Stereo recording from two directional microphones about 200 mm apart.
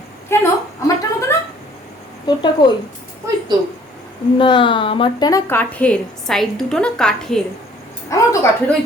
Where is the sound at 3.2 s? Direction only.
15° right (ahead or behind).